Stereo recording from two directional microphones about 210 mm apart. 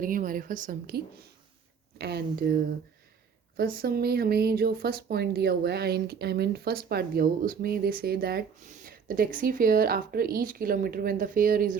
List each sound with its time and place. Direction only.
0.0 s a woman's voice: 40° right (ahead or behind)
3.6 s speech: 45° right (ahead or behind)